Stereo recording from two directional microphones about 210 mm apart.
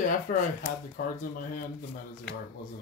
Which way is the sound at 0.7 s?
40° left (ahead or behind).